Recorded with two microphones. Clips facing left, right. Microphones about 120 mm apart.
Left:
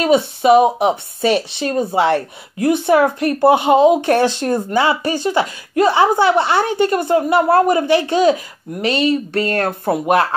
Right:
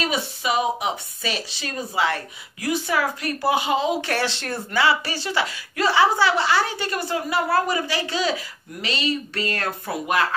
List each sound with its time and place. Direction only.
0.0 s speech: 55° left (ahead or behind)
4.4 s speech: 15° left (ahead or behind)
4.7 s a woman's voice: 50° left (ahead or behind)